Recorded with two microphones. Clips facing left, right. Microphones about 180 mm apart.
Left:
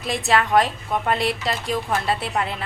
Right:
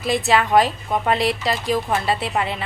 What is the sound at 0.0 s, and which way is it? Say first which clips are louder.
A woman's voice: right 3 dB; centre (ahead or behind).